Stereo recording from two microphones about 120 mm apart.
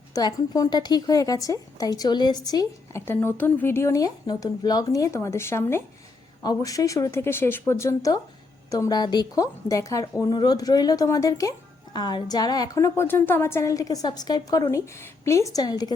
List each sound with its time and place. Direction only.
0.1 s a woman's voice: 30° left (ahead or behind)
3.1 s a woman's voice: 15° left (ahead or behind)
6.4 s a woman's voice: 30° left (ahead or behind)